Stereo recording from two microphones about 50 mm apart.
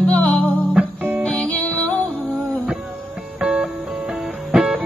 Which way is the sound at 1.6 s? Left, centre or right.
Left.